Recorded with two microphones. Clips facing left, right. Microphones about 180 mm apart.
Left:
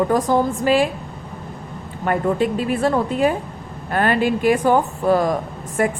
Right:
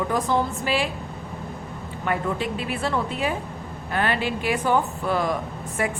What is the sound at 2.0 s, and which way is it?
Speech, 45° left (ahead or behind).